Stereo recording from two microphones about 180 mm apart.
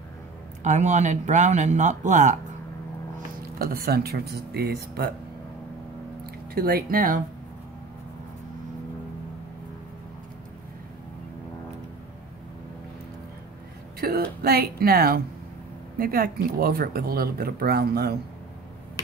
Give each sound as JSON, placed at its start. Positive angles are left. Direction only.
{"t": 0.7, "sound": "speech", "side_deg": -40}
{"t": 3.5, "sound": "speech", "side_deg": -55}
{"t": 6.5, "sound": "speech", "side_deg": -55}
{"t": 13.9, "sound": "speech", "side_deg": -60}